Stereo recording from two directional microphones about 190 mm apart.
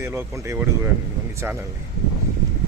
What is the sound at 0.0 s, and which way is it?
Speech, 15° right (ahead or behind).